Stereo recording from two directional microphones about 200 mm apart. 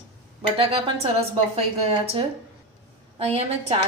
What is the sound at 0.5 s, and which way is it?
A woman's voice, 25° right (ahead or behind).